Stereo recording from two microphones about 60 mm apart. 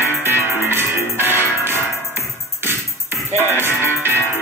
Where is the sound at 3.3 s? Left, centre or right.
Right.